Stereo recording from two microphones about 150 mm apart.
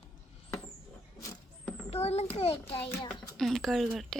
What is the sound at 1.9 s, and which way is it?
Speech, 45° left (ahead or behind).